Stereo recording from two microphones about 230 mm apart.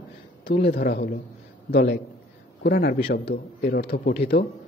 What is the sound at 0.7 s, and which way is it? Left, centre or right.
A man's voice, left.